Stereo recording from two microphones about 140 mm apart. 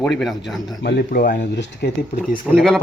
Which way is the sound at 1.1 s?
90° left.